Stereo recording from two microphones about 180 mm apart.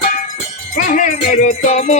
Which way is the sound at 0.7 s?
45° left (ahead or behind).